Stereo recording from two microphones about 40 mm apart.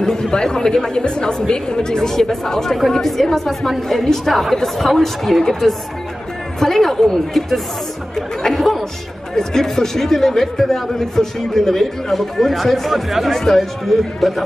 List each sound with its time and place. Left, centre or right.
0.0 s speech: centre
4.3 s a man's voice: centre
6.6 s a man's voice: centre
9.3 s a man's voice: centre